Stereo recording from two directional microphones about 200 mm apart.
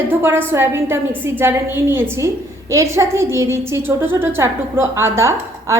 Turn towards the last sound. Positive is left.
turn(degrees=-15)  # may be behind; listen again after turning